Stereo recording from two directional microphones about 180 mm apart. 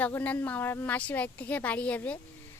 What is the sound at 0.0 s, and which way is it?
A woman's voice, 10° left (ahead or behind).